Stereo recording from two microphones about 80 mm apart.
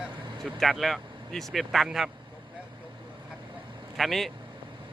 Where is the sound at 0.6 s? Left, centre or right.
Centre.